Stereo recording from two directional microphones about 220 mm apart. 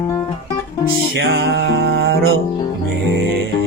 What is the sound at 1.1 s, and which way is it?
Music, 50° right (ahead or behind).